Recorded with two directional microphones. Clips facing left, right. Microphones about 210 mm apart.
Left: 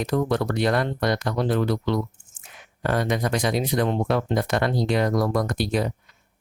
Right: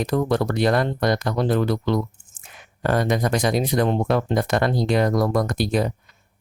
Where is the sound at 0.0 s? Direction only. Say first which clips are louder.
Right 2 dB; 35° right (ahead or behind).